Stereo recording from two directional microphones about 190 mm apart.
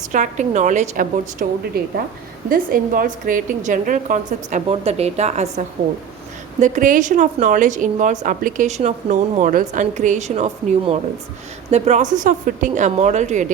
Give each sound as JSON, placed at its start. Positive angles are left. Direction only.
{"t": 0.1, "sound": "a woman's voice", "side_deg": -40}